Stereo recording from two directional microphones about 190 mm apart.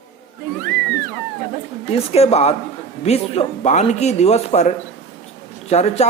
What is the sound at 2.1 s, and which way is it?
Speech, 35° left (ahead or behind).